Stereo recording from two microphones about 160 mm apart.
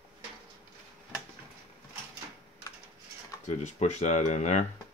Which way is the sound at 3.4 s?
45° left (ahead or behind).